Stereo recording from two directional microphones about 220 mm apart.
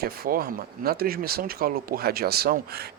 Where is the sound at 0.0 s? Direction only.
40° right (ahead or behind).